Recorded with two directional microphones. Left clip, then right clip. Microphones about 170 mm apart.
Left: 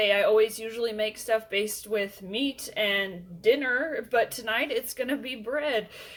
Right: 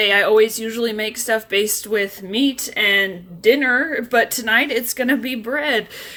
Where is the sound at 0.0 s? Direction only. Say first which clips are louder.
Right 8 dB; 35° right (ahead or behind).